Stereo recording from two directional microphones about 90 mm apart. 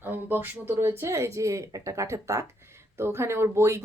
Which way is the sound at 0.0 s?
20° right (ahead or behind).